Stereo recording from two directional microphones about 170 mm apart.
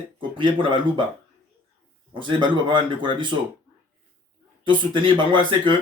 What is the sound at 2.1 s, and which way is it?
Speech, 30° right (ahead or behind).